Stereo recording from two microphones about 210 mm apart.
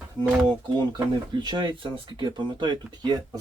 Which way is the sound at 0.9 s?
20° right (ahead or behind).